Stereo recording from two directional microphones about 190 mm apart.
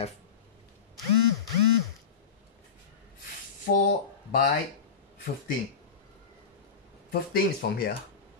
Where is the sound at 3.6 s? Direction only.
45° left (ahead or behind).